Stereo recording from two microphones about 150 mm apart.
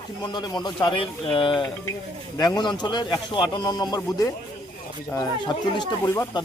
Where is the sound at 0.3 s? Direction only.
30° left (ahead or behind).